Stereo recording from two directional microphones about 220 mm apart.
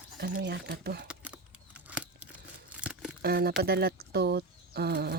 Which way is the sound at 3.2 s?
45° right (ahead or behind).